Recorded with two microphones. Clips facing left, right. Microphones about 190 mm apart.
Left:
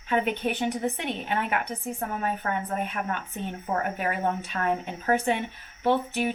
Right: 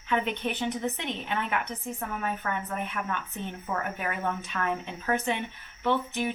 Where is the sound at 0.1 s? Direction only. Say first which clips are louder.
Left 3 dB; 35° left (ahead or behind).